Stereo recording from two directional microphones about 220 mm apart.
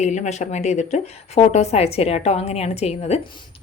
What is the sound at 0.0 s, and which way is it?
A woman's voice, 30° left (ahead or behind).